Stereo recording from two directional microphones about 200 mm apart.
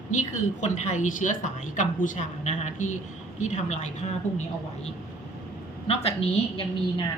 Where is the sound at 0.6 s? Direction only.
35° left (ahead or behind).